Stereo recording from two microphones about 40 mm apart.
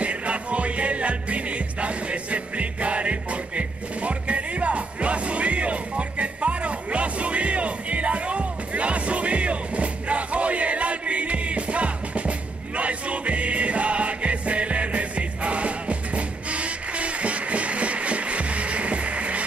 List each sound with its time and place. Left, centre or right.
0.0 s music: right